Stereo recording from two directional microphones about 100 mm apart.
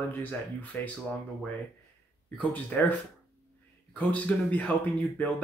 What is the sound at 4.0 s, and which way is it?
Speech, 15° left (ahead or behind).